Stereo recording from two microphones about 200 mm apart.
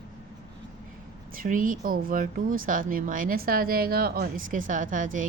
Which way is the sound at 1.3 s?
45° right (ahead or behind).